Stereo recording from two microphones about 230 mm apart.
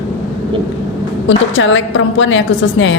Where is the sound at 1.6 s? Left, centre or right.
Left.